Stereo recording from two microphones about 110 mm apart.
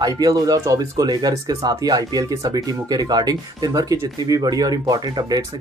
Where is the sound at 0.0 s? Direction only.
35° right (ahead or behind).